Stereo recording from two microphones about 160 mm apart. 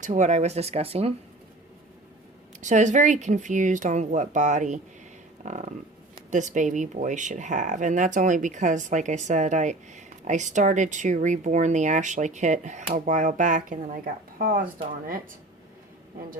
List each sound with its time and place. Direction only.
0.0 s speech: 50° right (ahead or behind)
2.6 s speech: 50° right (ahead or behind)
5.4 s a sound: 50° right (ahead or behind)
6.3 s speech: 50° right (ahead or behind)